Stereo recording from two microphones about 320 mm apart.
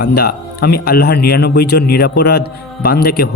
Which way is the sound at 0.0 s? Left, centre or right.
Left.